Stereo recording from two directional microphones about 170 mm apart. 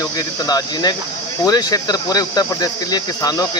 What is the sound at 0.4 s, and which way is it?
Speech, 25° left (ahead or behind).